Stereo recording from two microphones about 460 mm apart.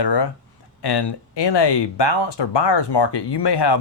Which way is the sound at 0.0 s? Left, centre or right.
Left.